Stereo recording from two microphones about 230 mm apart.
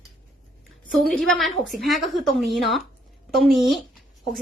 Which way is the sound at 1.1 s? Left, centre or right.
Centre.